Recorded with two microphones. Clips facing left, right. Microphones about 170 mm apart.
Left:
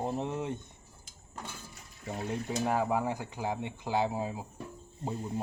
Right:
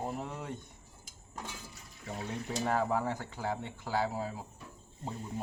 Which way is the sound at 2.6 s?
10° left (ahead or behind).